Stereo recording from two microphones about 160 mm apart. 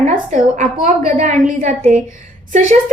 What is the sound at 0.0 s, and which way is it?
A woman's voice, 45° right (ahead or behind).